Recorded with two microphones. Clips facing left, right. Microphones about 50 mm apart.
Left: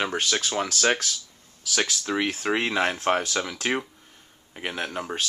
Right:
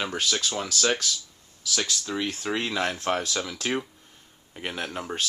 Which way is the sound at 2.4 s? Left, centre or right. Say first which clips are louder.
Left 3 dB; left.